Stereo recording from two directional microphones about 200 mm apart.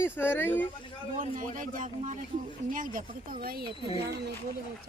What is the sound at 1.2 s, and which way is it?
Speech, 40° right (ahead or behind).